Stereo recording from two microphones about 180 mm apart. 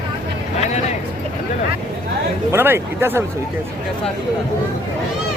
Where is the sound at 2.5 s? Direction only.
10° right (ahead or behind).